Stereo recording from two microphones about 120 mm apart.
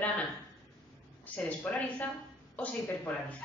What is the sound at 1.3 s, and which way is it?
Speech, 15° left (ahead or behind).